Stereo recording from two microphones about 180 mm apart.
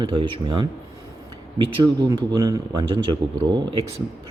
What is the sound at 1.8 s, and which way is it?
Speech, 25° right (ahead or behind).